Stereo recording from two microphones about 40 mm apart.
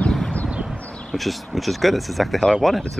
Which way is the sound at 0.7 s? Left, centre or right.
Left.